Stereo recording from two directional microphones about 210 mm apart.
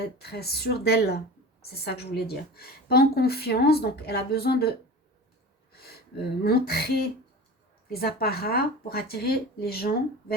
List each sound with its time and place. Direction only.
0.2 s a woman's voice: 50° left (ahead or behind)
6.4 s a woman's voice: 45° left (ahead or behind)
7.9 s a woman's voice: 45° left (ahead or behind)